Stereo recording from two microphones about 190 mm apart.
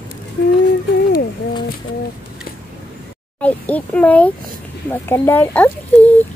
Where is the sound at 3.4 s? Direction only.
10° left (ahead or behind).